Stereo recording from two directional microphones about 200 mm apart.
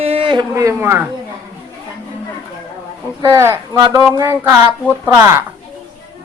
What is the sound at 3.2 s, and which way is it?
A woman's voice, 15° right (ahead or behind).